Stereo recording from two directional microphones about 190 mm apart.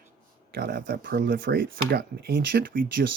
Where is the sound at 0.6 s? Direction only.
55° right (ahead or behind).